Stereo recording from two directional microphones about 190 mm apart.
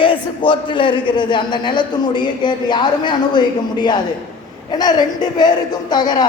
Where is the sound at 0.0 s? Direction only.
25° left (ahead or behind).